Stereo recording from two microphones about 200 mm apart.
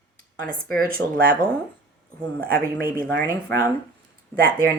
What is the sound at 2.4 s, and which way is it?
Speech, 50° right (ahead or behind).